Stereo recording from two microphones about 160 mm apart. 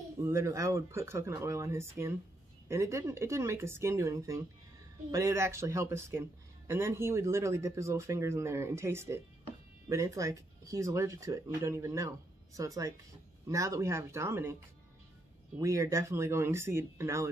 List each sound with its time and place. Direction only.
0.2 s speech: 15° right (ahead or behind)
15.6 s speech: 20° right (ahead or behind)